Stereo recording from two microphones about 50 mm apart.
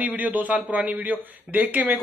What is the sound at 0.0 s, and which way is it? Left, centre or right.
A man's voice, right.